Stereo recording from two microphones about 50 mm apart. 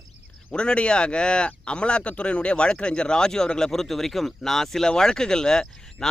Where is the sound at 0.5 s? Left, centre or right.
Left.